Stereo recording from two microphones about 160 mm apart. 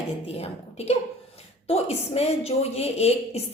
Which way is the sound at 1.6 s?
40° left (ahead or behind).